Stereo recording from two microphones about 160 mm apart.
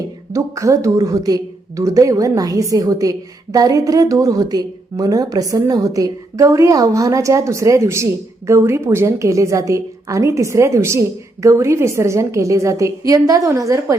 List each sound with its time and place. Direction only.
0.3 s a woman's voice: 20° right (ahead or behind)